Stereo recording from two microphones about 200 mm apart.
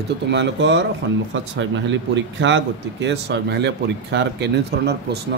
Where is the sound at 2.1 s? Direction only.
65° right (ahead or behind).